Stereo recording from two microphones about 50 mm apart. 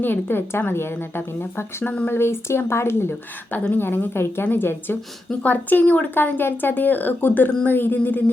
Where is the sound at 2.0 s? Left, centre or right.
Left.